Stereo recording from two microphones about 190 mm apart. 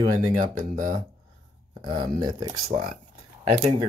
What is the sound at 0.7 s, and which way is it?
Speech, 45° right (ahead or behind).